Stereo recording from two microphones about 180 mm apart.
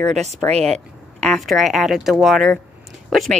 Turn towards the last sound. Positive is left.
turn(degrees=0)  # may be behind; listen again after turning